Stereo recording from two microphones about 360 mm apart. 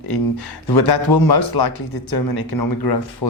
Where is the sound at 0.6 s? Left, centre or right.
Left.